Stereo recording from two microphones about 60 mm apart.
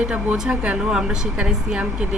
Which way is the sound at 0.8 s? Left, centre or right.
Centre.